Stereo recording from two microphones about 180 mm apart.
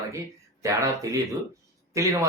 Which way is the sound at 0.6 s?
15° right (ahead or behind).